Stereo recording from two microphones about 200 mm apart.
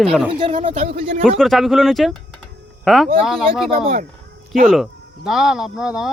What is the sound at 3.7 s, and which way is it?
Speech, 45° right (ahead or behind).